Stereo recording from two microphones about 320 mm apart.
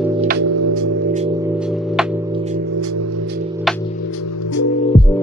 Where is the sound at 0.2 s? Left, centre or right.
Right.